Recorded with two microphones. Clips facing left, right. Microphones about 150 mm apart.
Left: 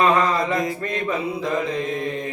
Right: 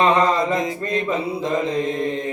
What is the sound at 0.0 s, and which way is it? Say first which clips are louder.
Mantra: right 2 dB; 25° right (ahead or behind).